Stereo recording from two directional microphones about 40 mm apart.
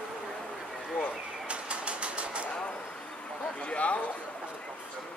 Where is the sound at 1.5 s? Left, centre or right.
Right.